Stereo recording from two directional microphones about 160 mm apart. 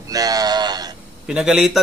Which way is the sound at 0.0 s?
20° right (ahead or behind).